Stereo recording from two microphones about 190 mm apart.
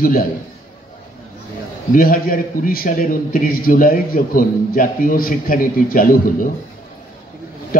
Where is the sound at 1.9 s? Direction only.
50° left (ahead or behind).